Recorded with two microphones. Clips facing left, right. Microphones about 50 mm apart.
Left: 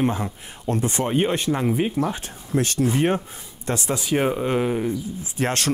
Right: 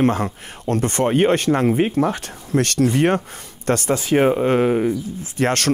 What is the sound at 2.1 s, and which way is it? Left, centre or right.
Speech, right.